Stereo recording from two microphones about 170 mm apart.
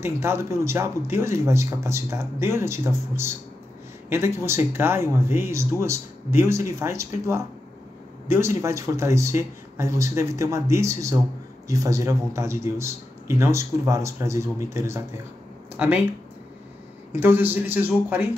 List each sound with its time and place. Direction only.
0.0 s speech: 15° right (ahead or behind)
17.1 s speech: 15° right (ahead or behind)